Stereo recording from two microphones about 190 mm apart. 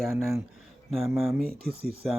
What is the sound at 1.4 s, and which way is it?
Speech, 55° right (ahead or behind).